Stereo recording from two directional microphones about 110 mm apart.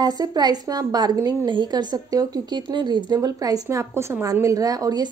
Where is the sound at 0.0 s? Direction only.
35° right (ahead or behind).